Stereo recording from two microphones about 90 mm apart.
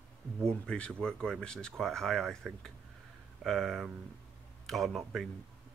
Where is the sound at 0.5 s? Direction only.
10° left (ahead or behind).